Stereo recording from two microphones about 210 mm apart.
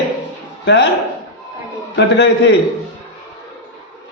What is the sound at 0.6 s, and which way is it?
Speech, 55° left (ahead or behind).